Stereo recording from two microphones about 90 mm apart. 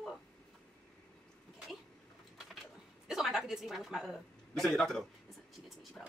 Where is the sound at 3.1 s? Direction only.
5° right (ahead or behind).